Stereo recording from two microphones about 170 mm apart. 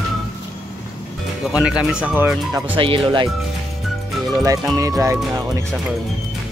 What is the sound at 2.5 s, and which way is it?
Speech, 30° right (ahead or behind).